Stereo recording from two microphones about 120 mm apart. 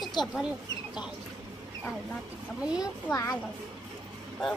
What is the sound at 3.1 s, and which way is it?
Speech, 25° left (ahead or behind).